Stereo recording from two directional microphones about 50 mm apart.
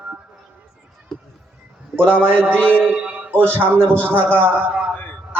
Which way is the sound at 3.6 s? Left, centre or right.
Left.